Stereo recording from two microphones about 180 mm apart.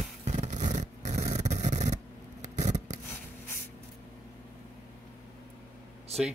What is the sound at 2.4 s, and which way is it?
Rub, 40° right (ahead or behind).